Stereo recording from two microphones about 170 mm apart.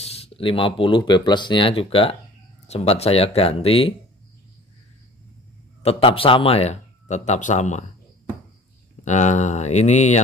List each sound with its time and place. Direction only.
0.0 s speech: 35° left (ahead or behind)
5.8 s speech: 35° left (ahead or behind)
9.0 s speech: 45° left (ahead or behind)